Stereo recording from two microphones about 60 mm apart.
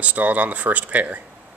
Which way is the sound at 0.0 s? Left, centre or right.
Right.